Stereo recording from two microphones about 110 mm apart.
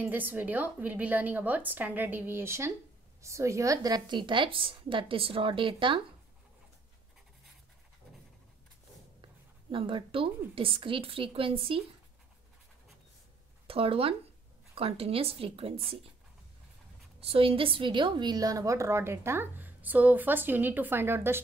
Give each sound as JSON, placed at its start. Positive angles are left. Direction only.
{"t": 0.0, "sound": "a woman's voice", "side_deg": -15}
{"t": 9.2, "sound": "a sound", "side_deg": -50}
{"t": 10.5, "sound": "a woman's voice", "side_deg": -55}
{"t": 13.7, "sound": "a woman's voice", "side_deg": -60}
{"t": 17.2, "sound": "a woman's voice", "side_deg": -60}